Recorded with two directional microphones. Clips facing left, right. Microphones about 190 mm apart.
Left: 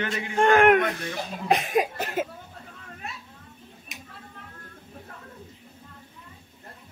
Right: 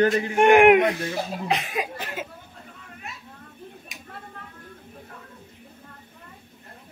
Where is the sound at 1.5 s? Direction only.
45° left (ahead or behind).